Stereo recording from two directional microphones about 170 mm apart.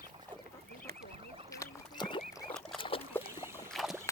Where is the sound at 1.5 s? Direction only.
20° left (ahead or behind).